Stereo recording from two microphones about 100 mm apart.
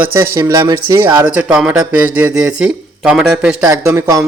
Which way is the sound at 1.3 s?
10° right (ahead or behind).